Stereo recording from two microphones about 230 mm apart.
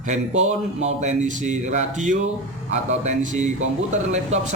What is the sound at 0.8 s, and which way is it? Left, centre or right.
Speech, right.